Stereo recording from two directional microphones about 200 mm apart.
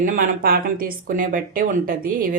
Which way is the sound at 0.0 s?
45° right (ahead or behind).